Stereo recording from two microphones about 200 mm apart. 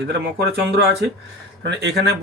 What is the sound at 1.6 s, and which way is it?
Speech, 60° right (ahead or behind).